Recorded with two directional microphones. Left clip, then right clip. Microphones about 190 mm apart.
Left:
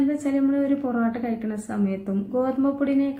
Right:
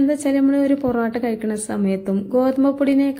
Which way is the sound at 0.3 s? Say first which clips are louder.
Right 5 dB; 45° right (ahead or behind).